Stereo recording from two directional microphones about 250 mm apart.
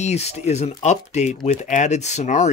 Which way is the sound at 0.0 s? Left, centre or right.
Left.